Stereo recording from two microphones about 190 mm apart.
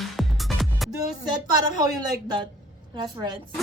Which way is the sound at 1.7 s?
20° right (ahead or behind).